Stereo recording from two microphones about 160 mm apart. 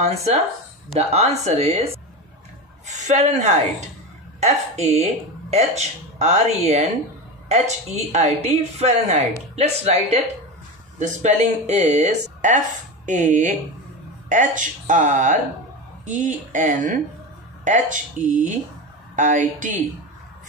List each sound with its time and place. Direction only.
0.0 s speech: 40° right (ahead or behind)
3.1 s speech: 45° right (ahead or behind)